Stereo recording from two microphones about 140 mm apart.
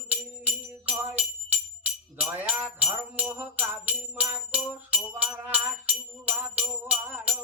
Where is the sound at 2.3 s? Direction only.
10° right (ahead or behind).